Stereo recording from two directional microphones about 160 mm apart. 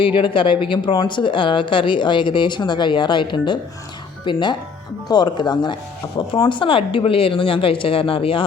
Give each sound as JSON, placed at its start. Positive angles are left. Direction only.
{"t": 0.2, "sound": "speech", "side_deg": 30}